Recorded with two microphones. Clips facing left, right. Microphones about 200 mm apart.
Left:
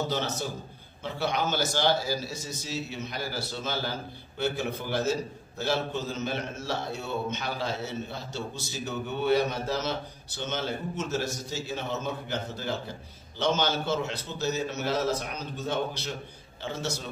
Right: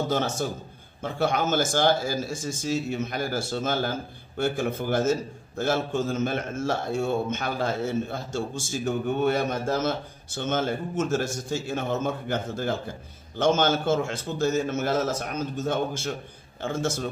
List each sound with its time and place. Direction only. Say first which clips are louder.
0.1 s a man's voice: right 5 dB; 50° right (ahead or behind)